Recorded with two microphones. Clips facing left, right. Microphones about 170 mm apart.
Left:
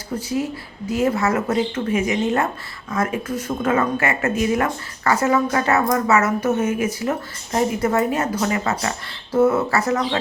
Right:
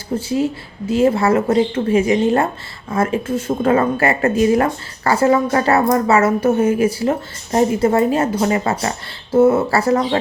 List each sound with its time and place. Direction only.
0.1 s speech: 25° right (ahead or behind)